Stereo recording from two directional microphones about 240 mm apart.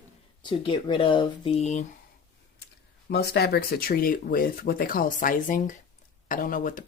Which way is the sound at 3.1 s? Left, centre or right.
Left.